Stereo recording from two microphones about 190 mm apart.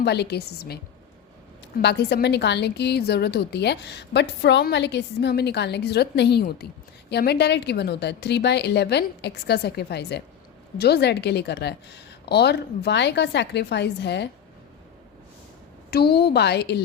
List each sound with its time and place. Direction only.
0.0 s a woman's voice: 60° left (ahead or behind)
1.8 s a woman's voice: 60° left (ahead or behind)
15.9 s a woman's voice: 55° left (ahead or behind)